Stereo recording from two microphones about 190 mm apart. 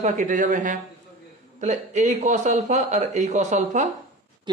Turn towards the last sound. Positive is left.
turn(degrees=-40)  # may be behind; listen again after turning